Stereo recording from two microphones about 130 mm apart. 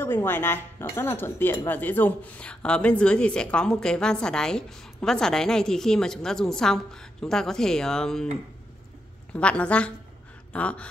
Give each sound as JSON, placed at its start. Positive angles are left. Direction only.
{"t": 0.0, "sound": "a woman's voice", "side_deg": 15}
{"t": 9.3, "sound": "speech", "side_deg": 10}
{"t": 10.5, "sound": "gasp", "side_deg": 10}